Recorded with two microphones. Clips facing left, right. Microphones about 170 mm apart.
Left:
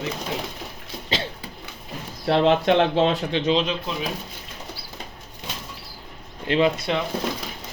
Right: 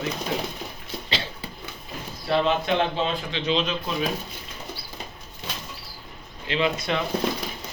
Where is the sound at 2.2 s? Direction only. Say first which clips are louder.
Left 5 dB; 80° left.